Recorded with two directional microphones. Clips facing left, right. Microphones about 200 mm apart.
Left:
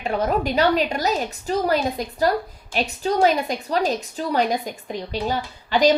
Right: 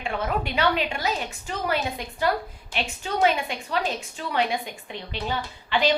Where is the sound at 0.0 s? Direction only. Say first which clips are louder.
Left 6 dB; 40° left (ahead or behind).